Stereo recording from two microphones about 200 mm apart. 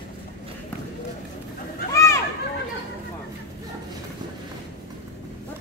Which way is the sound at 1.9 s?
15° left (ahead or behind).